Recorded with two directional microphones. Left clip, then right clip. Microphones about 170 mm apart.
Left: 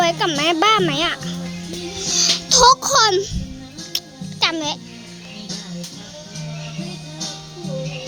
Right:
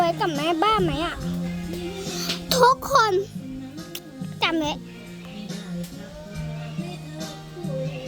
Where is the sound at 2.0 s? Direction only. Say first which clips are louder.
Left 14 dB; 10° right (ahead or behind).